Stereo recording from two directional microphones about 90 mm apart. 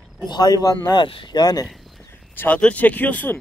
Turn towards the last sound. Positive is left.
turn(degrees=20)  # may be behind; listen again after turning